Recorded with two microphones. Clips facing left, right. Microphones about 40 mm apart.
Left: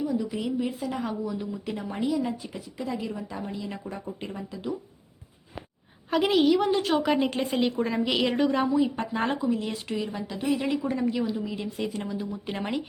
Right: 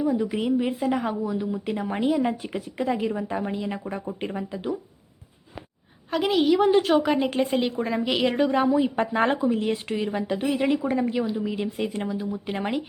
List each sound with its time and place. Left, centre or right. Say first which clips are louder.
0.0 s speech: right 4 dB; right
6.1 s a woman's voice: even; centre
9.0 s a woman's voice: right 5 dB; right
10.7 s a woman's voice: right 3 dB; centre
12.0 s a woman's voice: right 3 dB; centre